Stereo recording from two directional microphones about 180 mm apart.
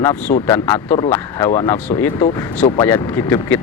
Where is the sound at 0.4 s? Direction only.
15° left (ahead or behind).